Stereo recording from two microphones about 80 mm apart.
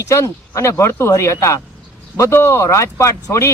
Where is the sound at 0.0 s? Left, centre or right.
Left.